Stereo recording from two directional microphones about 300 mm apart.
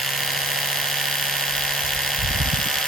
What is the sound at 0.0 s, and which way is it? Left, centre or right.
Electric toothbrush, centre.